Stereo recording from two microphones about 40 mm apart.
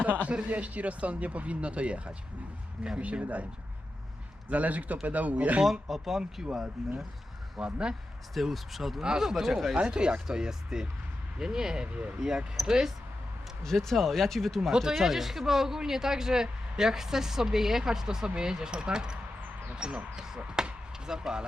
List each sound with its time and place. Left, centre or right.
0.3 s speech: right
4.4 s speech: right
5.9 s speech: centre
8.3 s speech: centre
9.0 s speech: centre
11.9 s speech: right
12.6 s speech: centre
13.6 s speech: centre
14.7 s speech: centre
20.5 s chop: centre